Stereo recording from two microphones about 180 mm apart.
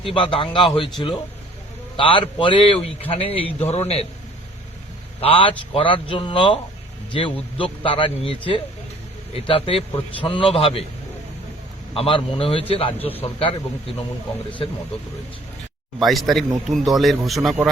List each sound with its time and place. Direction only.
0.0 s a man's voice: 30° left (ahead or behind)
5.2 s a man's voice: 30° left (ahead or behind)
11.9 s a man's voice: 30° left (ahead or behind)
16.0 s a man's voice: centre (ahead or behind)